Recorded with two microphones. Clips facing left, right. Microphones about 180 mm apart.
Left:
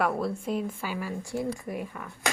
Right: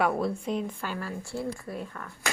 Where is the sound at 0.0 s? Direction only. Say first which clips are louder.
Right 1 dB; centre (ahead or behind).